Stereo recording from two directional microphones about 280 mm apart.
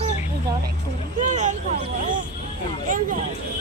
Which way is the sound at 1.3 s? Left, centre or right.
Right.